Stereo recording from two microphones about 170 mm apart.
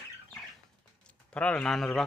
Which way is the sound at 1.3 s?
5° left (ahead or behind).